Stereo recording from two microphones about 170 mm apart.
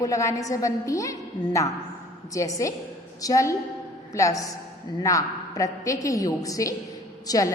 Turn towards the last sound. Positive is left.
turn(degrees=20)  # may be behind; listen again after turning